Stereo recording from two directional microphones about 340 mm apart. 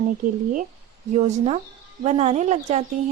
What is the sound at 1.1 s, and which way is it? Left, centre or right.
A woman's voice, centre.